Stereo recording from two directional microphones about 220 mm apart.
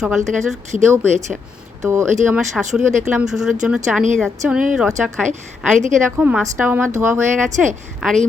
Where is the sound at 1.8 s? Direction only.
15° right (ahead or behind).